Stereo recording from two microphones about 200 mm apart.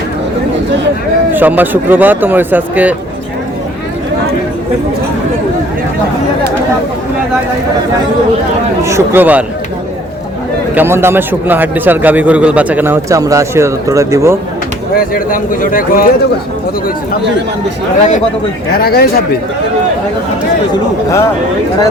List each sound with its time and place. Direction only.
1.3 s a man's voice: 10° right (ahead or behind)
8.8 s a man's voice: 15° right (ahead or behind)
10.8 s a man's voice: 10° right (ahead or behind)
14.9 s speech: 45° left (ahead or behind)
18.7 s speech: 50° left (ahead or behind)